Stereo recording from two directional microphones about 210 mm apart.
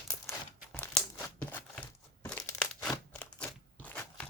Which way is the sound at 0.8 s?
5° left (ahead or behind).